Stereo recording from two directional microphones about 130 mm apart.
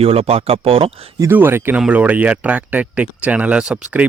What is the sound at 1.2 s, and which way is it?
Speech, 15° right (ahead or behind).